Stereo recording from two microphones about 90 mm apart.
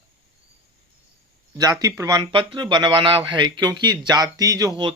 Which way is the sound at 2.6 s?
55° right (ahead or behind).